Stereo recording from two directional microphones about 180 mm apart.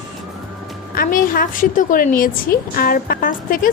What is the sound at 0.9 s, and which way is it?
A woman's voice, 50° left (ahead or behind).